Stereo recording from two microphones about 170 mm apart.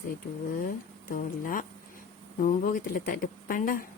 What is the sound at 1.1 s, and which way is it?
Speech, 55° left (ahead or behind).